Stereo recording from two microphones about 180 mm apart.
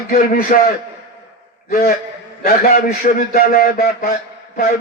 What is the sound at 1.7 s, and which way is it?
A man's voice, 60° left (ahead or behind).